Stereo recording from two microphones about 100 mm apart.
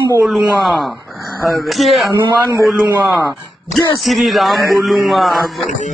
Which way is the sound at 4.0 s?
Centre (ahead or behind).